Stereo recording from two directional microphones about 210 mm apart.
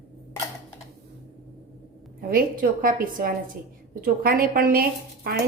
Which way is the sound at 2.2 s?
45° right (ahead or behind).